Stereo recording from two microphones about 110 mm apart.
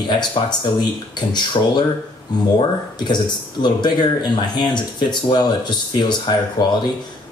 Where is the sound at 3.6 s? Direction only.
45° left (ahead or behind).